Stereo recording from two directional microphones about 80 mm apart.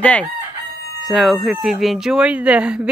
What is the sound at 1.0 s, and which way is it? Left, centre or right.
Speech, centre.